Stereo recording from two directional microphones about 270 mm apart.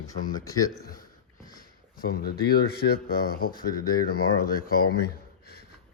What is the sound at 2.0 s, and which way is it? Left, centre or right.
Speech, left.